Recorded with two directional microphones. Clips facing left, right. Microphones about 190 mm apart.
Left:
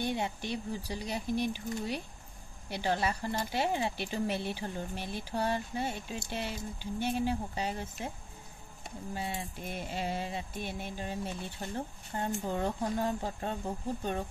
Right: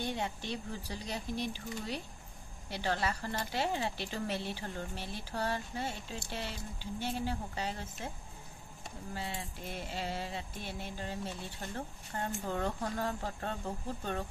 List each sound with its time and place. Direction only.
0.0 s a sound: 15° left (ahead or behind)
0.8 s speech: 20° left (ahead or behind)
9.1 s speech: 15° left (ahead or behind)